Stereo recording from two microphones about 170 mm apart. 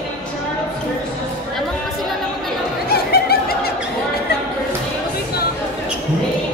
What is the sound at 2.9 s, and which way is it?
Snicker, 65° left (ahead or behind).